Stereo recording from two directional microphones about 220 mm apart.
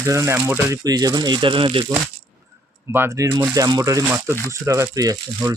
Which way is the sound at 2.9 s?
10° right (ahead or behind).